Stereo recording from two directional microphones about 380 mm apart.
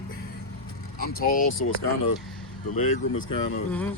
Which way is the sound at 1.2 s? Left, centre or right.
Left.